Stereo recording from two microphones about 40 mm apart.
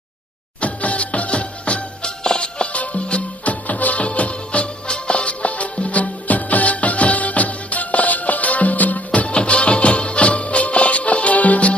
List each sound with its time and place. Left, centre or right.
0.6 s music: left